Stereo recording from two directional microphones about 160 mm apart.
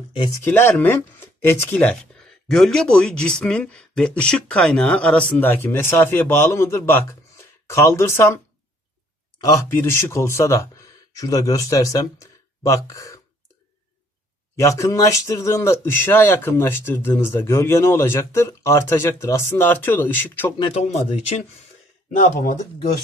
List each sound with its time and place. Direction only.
0.3 s speech: 15° left (ahead or behind)
2.4 s speech: 5° left (ahead or behind)
9.4 s speech: 20° left (ahead or behind)
14.6 s speech: 20° left (ahead or behind)
20.5 s speech: 30° left (ahead or behind)